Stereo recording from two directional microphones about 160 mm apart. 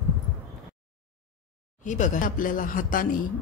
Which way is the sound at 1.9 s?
50° left (ahead or behind).